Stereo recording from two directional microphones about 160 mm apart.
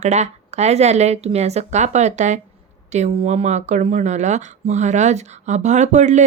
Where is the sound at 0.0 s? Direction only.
45° right (ahead or behind).